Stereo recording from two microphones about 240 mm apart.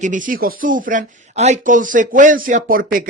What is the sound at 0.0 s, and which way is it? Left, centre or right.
Speech, right.